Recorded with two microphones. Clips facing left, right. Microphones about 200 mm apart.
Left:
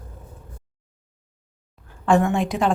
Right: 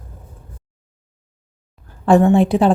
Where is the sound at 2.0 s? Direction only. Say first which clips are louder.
Right 7 dB; 35° right (ahead or behind).